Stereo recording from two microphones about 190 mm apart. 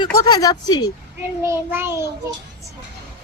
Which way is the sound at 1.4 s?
15° right (ahead or behind).